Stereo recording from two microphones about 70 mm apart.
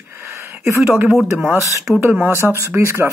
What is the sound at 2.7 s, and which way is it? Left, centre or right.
Speech, right.